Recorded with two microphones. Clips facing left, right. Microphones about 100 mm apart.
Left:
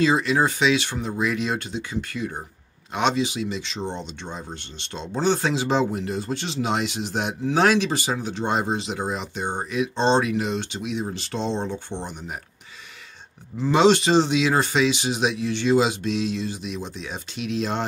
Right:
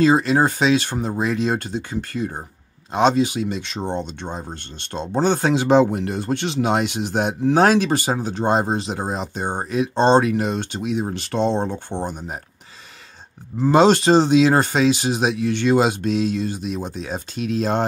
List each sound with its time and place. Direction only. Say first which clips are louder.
0.0 s speech: right 4 dB; 40° right (ahead or behind)
13.6 s speech: right 3 dB; 45° right (ahead or behind)